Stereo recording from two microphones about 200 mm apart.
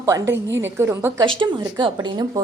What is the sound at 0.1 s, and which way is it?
Speech, 15° right (ahead or behind).